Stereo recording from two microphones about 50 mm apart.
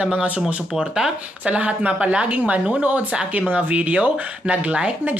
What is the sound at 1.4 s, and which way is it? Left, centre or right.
Speech, right.